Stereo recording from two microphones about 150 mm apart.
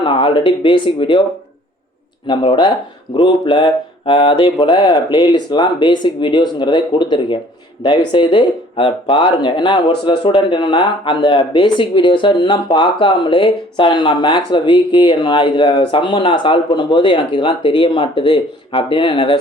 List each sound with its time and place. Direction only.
0.0 s speech: 35° left (ahead or behind)
2.2 s speech: 35° left (ahead or behind)